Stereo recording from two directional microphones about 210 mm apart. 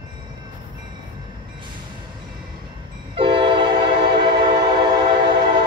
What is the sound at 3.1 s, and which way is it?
Train, 25° right (ahead or behind).